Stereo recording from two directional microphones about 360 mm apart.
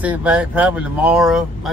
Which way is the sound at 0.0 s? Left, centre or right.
Centre.